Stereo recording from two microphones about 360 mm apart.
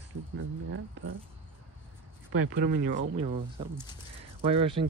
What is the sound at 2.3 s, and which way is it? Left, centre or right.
Speech, right.